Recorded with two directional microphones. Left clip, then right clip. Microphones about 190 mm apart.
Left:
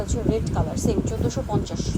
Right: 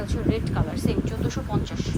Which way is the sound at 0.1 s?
20° left (ahead or behind).